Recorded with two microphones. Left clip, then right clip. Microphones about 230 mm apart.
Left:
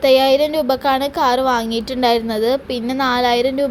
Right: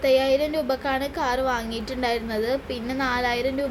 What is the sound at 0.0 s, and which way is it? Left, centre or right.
A woman's voice, left.